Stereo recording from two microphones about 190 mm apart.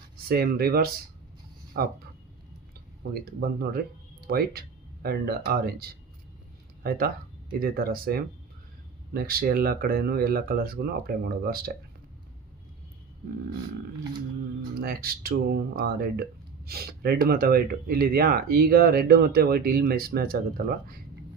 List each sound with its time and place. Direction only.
0.3 s speech: 55° right (ahead or behind)
3.2 s speech: 55° right (ahead or behind)
14.8 s speech: 50° right (ahead or behind)